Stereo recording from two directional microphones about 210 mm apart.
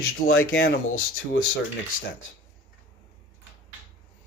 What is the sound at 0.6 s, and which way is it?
Speech, 90° left.